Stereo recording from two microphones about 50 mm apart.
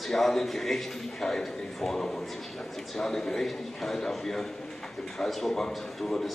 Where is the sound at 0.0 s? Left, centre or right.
Centre.